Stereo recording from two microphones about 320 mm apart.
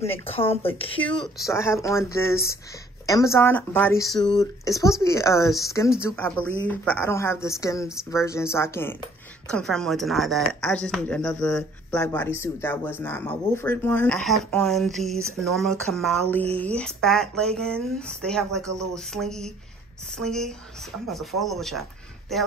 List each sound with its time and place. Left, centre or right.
0.0 s a woman's voice: centre